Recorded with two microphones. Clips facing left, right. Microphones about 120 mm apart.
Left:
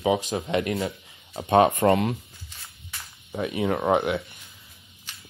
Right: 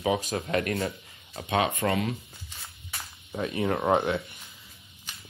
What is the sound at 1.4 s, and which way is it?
Speech, 45° left (ahead or behind).